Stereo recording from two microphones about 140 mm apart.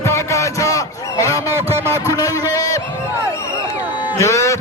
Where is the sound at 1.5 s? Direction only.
15° right (ahead or behind).